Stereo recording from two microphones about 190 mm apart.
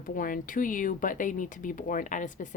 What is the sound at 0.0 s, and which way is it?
Speech, 45° left (ahead or behind).